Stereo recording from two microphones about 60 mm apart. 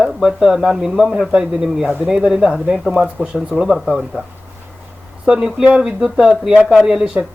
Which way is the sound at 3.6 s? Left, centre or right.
Centre.